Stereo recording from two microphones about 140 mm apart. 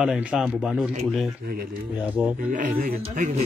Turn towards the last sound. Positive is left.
turn(degrees=-55)  # may be behind; listen again after turning